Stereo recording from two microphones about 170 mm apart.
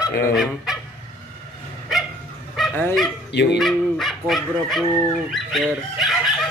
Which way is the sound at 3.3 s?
80° left.